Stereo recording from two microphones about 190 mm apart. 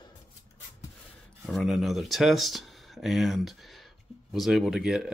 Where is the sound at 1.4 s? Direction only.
Centre (ahead or behind).